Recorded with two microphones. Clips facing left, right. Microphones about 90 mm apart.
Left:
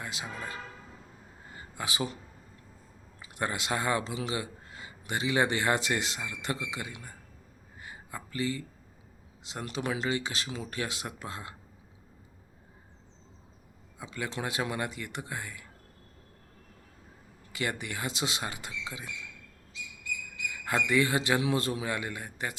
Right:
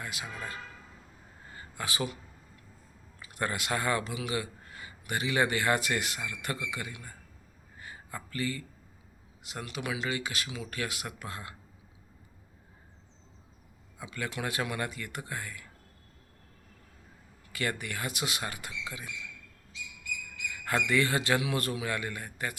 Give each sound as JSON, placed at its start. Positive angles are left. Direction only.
{"t": 0.0, "sound": "speech", "side_deg": 25}
{"t": 1.5, "sound": "a sound", "side_deg": 20}
{"t": 3.2, "sound": "speech", "side_deg": 20}
{"t": 7.8, "sound": "a sound", "side_deg": 20}
{"t": 9.4, "sound": "a man's voice", "side_deg": 25}
{"t": 9.6, "sound": "speech", "side_deg": 35}
{"t": 14.0, "sound": "speech", "side_deg": 25}
{"t": 17.5, "sound": "speech", "side_deg": 20}
{"t": 20.7, "sound": "speech", "side_deg": 20}